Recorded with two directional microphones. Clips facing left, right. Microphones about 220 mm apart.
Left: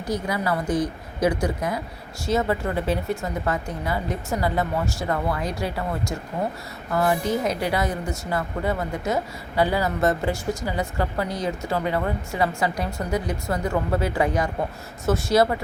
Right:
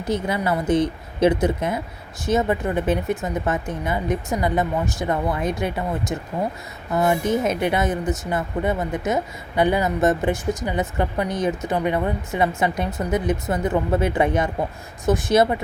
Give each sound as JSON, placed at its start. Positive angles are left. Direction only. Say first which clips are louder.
{"t": 0.0, "sound": "speech", "louder": "right 3 dB", "side_deg": -25}